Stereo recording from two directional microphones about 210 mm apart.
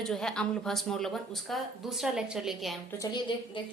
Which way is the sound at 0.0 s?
Centre (ahead or behind).